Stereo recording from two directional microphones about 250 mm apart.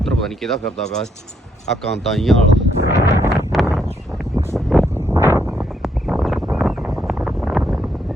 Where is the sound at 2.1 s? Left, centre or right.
Centre.